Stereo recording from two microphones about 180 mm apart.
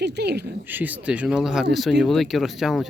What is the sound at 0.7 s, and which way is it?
Speech, 10° right (ahead or behind).